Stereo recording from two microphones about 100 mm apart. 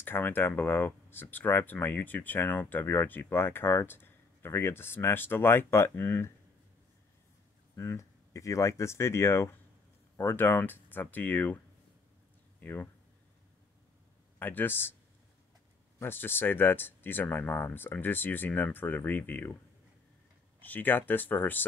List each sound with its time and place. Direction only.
0.0 s speech: 20° left (ahead or behind)
7.7 s speech: 30° left (ahead or behind)
12.5 s a sound: 20° left (ahead or behind)
14.4 s speech: 20° left (ahead or behind)
16.0 s speech: 20° left (ahead or behind)
20.6 s speech: 20° left (ahead or behind)